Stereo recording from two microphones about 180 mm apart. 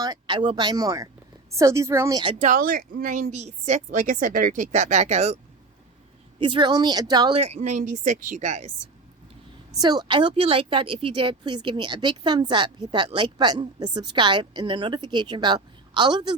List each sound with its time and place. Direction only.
0.0 s speech: 25° right (ahead or behind)
2.4 s a woman's voice: 50° right (ahead or behind)
6.4 s speech: 25° right (ahead or behind)
7.3 s a woman's voice: 35° right (ahead or behind)
9.7 s speech: 20° right (ahead or behind)